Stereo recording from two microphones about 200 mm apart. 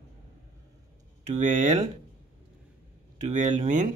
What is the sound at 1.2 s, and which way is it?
Speech, 40° right (ahead or behind).